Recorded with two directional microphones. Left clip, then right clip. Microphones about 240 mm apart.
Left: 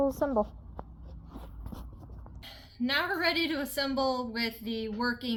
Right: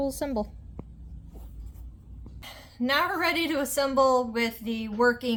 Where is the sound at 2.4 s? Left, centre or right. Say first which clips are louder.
Right 3 dB; right.